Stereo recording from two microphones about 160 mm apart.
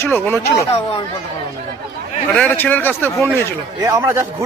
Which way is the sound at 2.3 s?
10° left (ahead or behind).